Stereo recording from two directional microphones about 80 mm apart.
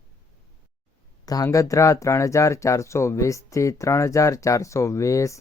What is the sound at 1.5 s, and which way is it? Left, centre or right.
Speech, left.